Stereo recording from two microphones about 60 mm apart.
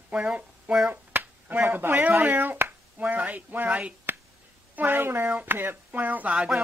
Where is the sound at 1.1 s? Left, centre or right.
Right.